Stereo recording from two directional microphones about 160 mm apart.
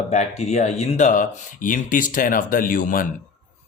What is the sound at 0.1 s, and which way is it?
Speech, 45° left (ahead or behind).